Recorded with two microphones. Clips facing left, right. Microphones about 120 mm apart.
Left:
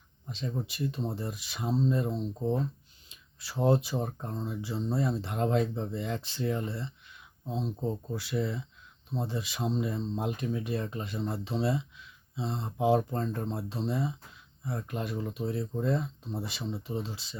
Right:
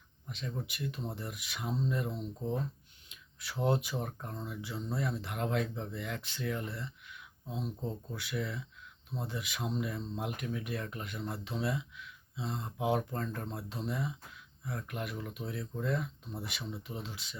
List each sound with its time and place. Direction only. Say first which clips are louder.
0.3 s speech: left 5 dB; 30° left (ahead or behind)